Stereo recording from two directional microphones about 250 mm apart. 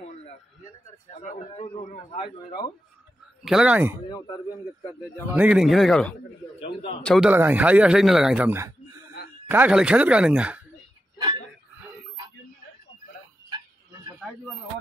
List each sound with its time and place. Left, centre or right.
1.2 s a man's voice: left
3.4 s a man's voice: centre
4.1 s a man's voice: centre
5.3 s a man's voice: centre
6.6 s a man's voice: left
7.0 s a man's voice: centre